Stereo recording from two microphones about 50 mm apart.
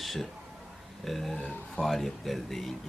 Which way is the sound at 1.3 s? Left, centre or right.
Left.